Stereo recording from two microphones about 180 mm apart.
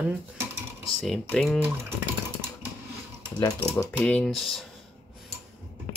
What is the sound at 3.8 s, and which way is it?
Speech, 10° left (ahead or behind).